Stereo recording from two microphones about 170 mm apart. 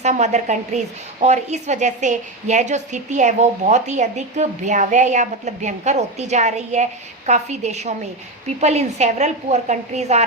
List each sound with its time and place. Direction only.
0.0 s a woman's voice: 40° right (ahead or behind)